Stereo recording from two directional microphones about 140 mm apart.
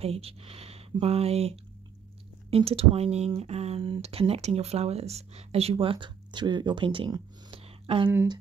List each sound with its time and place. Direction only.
0.0 s speech: 45° right (ahead or behind)
2.5 s speech: 45° right (ahead or behind)